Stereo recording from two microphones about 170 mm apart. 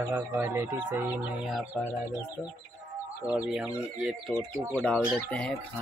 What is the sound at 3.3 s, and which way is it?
Speech, 5° right (ahead or behind).